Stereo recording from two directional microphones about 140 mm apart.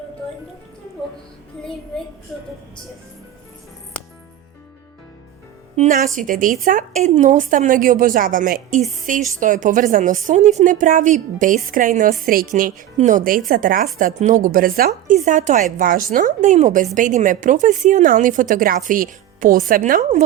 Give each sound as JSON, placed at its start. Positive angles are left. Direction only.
{"t": 5.9, "sound": "a woman's voice", "side_deg": -70}
{"t": 12.2, "sound": "a woman's voice", "side_deg": -90}
{"t": 14.0, "sound": "speech", "side_deg": -65}
{"t": 15.8, "sound": "a woman's voice", "side_deg": -80}